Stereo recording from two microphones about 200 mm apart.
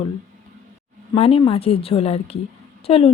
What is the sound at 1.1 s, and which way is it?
Speech, 30° left (ahead or behind).